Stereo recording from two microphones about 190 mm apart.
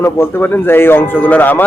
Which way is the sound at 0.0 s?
10° left (ahead or behind).